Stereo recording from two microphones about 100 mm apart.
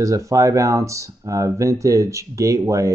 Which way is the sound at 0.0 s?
30° right (ahead or behind).